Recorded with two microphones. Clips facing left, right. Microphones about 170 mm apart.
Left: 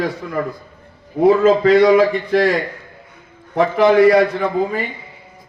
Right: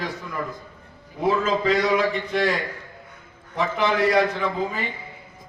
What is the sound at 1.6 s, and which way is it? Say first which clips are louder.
Speech: left 9 dB; 60° left (ahead or behind).